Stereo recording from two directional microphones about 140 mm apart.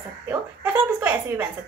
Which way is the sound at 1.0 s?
15° right (ahead or behind).